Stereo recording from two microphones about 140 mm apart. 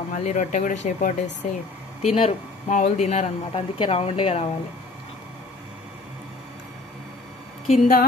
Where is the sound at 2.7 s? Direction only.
55° left (ahead or behind).